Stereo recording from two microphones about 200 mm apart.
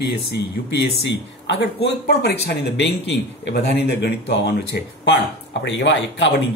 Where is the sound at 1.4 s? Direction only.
60° left (ahead or behind).